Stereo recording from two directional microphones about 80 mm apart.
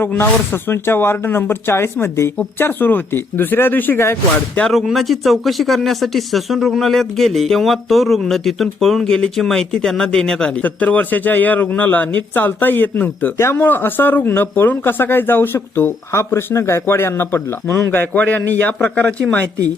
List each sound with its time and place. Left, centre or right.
0.2 s speech: left
4.7 s speech: centre